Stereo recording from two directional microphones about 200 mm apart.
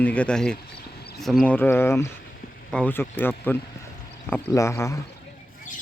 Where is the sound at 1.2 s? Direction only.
Centre (ahead or behind).